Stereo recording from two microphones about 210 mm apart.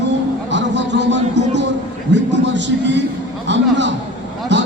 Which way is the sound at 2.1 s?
55° right (ahead or behind).